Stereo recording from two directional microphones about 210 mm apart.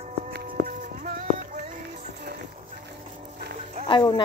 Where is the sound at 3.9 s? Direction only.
20° left (ahead or behind).